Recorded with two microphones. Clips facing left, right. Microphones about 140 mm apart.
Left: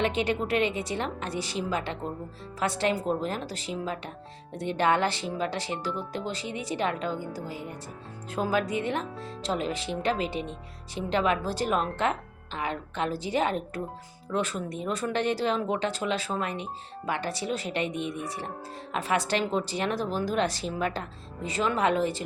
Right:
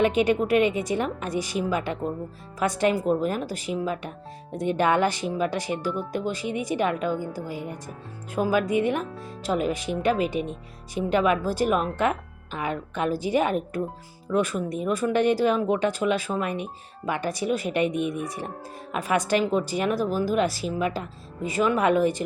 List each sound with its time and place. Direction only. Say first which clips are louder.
0.0 s speech: right 6 dB; 15° right (ahead or behind)
11.4 s speech: right 4 dB; 10° right (ahead or behind)